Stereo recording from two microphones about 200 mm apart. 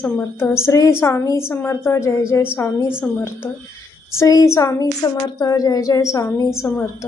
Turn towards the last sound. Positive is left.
turn(degrees=15)  # may be behind; listen again after turning